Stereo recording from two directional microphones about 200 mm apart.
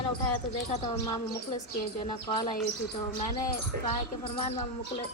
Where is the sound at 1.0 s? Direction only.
15° left (ahead or behind).